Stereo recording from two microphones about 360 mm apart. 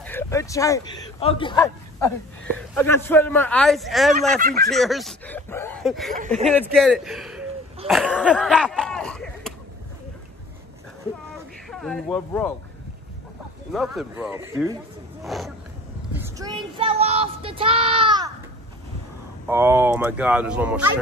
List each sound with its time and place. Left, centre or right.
0.0 s speech: centre
2.7 s speech: centre
4.4 s speech: right
4.6 s speech: centre
6.1 s speech: centre
6.5 s speech: centre
11.7 s speech: centre
13.7 s speech: centre
16.3 s speech: centre
19.4 s speech: centre